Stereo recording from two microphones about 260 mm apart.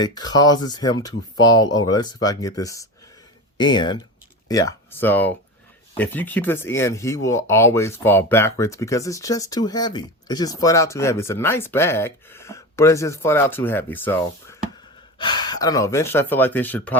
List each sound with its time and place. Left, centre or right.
0.0 s speech: centre